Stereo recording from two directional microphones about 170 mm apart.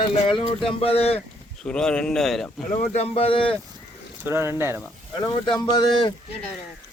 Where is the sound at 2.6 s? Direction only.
35° left (ahead or behind).